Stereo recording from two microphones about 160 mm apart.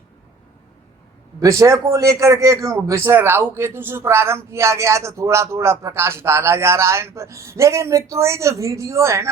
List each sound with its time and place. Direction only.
1.4 s a man's voice: 20° right (ahead or behind)